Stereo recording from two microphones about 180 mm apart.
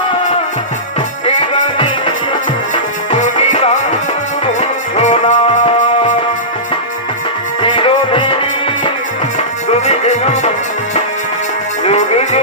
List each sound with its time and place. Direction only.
1.2 s music: 30° left (ahead or behind)
7.6 s music: 30° left (ahead or behind)
9.6 s music: 35° left (ahead or behind)
11.9 s music: 35° left (ahead or behind)